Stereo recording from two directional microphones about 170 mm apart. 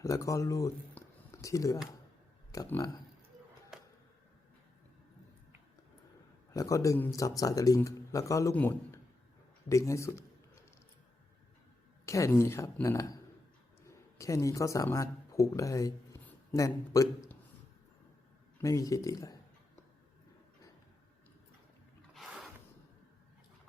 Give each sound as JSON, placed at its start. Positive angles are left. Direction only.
{"t": 0.0, "sound": "speech", "side_deg": 20}
{"t": 3.7, "sound": "a sound", "side_deg": -5}
{"t": 6.5, "sound": "a man's voice", "side_deg": 20}
{"t": 12.0, "sound": "speech", "side_deg": 15}
{"t": 18.6, "sound": "speech", "side_deg": 20}
{"t": 22.1, "sound": "a sound", "side_deg": 0}